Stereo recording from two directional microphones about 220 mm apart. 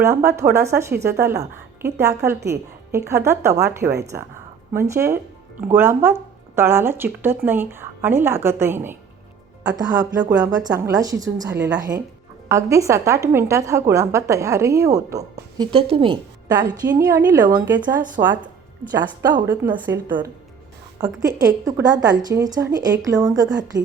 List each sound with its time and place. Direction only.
0.0 s a woman's voice: 15° right (ahead or behind)
21.2 s a woman's voice: 15° right (ahead or behind)